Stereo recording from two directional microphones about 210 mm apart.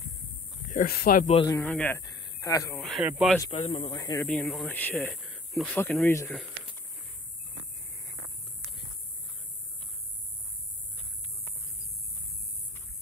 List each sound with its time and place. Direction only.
0.7 s speech: 40° left (ahead or behind)
1.2 s a man's voice: 30° left (ahead or behind)
1.5 s speech: 10° left (ahead or behind)
2.1 s a sound: 20° left (ahead or behind)
2.8 s speech: centre (ahead or behind)
3.4 s a man's voice: 25° left (ahead or behind)
4.3 s speech: 5° left (ahead or behind)